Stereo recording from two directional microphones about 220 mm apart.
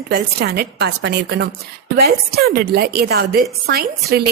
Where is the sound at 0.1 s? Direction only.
45° right (ahead or behind).